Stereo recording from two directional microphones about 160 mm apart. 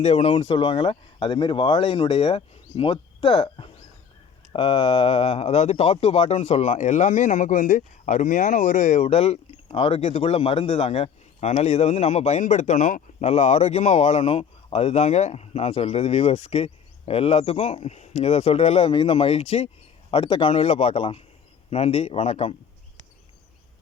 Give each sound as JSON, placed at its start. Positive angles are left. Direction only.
{"t": 0.0, "sound": "speech", "side_deg": 40}